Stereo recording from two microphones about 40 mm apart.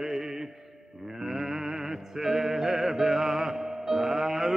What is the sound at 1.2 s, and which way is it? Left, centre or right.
Music, centre.